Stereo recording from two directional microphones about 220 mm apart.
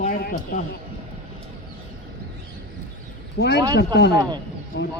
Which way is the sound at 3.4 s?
45° left (ahead or behind).